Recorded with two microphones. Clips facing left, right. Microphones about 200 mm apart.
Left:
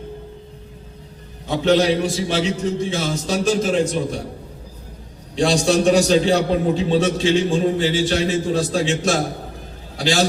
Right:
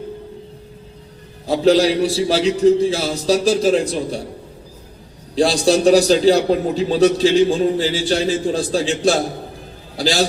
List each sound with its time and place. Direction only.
1.5 s a man's voice: 35° right (ahead or behind)
5.3 s a man's voice: 35° right (ahead or behind)